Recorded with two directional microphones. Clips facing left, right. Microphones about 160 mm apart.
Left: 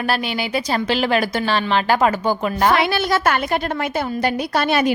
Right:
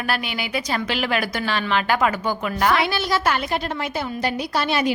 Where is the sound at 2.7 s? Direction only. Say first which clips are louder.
Left 3 dB; 55° left (ahead or behind).